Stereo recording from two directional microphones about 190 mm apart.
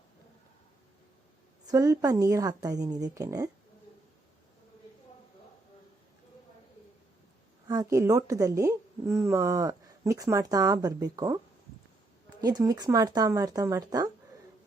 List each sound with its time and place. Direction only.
1.6 s a woman's voice: 15° right (ahead or behind)
7.7 s a woman's voice: 15° right (ahead or behind)
12.4 s a woman's voice: 20° right (ahead or behind)